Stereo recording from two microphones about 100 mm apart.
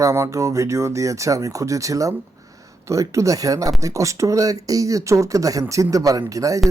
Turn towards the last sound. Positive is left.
turn(degrees=-35)  # may be behind; listen again after turning